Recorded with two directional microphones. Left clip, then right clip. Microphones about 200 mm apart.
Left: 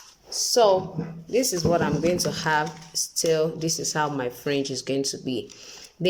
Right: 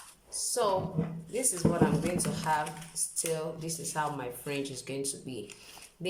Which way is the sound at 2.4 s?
40° left (ahead or behind).